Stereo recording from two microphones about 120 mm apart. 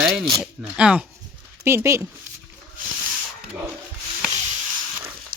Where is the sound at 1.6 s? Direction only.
25° right (ahead or behind).